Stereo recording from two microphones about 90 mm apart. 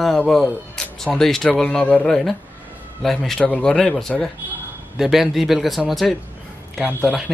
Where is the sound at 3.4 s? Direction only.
10° left (ahead or behind).